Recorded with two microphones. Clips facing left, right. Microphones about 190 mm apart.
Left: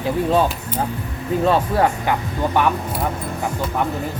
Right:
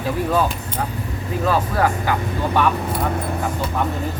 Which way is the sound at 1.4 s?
25° left (ahead or behind).